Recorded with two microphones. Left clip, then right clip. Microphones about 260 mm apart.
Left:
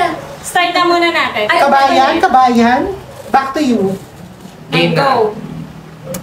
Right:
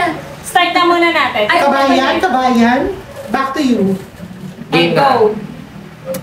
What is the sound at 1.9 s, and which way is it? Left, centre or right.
Speech, centre.